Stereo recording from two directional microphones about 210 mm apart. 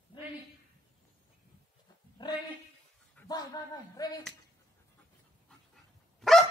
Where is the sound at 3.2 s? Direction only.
10° left (ahead or behind).